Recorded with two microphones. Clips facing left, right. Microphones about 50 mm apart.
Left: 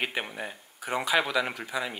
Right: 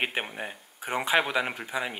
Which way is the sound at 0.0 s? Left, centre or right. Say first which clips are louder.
Right 1 dB; right.